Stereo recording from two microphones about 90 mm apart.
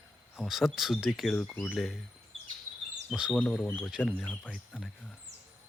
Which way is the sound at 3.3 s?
10° left (ahead or behind).